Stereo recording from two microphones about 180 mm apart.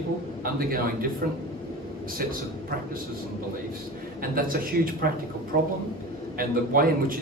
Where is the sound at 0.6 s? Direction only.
55° right (ahead or behind).